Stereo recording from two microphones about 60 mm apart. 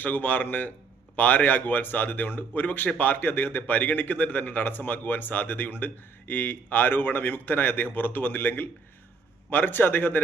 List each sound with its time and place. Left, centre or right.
0.0 s speech: left